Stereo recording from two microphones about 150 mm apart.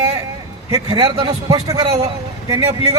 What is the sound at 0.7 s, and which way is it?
Speech, 45° right (ahead or behind).